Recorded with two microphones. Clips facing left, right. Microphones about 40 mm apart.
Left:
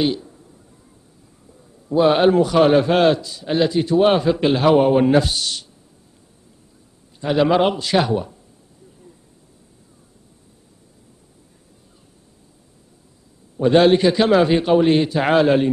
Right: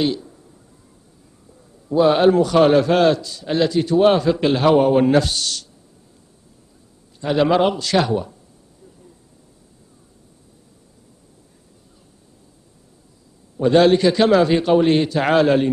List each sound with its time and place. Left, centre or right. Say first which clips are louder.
0.0 s speech: even; centre
2.0 s a man's voice: even; centre
7.2 s a man's voice: even; centre
13.7 s a man's voice: even; centre
14.7 s a man's voice: even; centre